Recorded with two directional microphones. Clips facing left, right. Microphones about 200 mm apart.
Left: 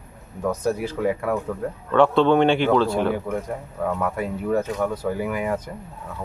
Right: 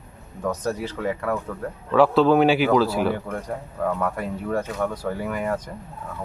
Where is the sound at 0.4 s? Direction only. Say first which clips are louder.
Left 3 dB; 10° left (ahead or behind).